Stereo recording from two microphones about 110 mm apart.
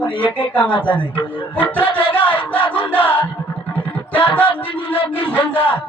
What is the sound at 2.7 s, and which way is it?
Music, 15° left (ahead or behind).